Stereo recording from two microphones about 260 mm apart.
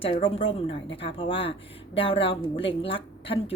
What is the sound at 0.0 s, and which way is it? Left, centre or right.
Speech, left.